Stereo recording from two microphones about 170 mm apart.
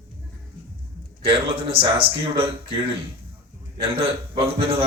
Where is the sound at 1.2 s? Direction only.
35° right (ahead or behind).